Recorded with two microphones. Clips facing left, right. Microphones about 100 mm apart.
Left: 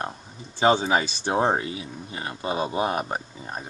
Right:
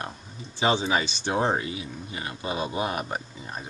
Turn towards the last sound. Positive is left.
turn(degrees=40)  # may be behind; listen again after turning